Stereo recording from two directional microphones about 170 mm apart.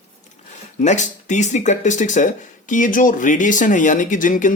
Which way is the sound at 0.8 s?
45° left (ahead or behind).